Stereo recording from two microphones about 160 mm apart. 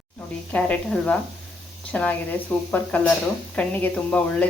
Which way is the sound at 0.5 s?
5° left (ahead or behind).